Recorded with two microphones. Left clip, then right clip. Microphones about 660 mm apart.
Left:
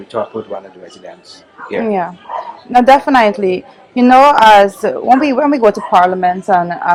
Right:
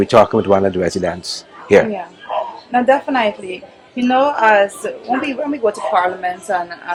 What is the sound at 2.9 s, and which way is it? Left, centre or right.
A woman's voice, left.